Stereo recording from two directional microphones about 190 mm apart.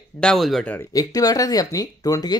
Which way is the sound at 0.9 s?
20° left (ahead or behind).